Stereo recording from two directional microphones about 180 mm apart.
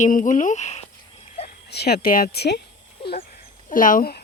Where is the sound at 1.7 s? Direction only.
65° left (ahead or behind).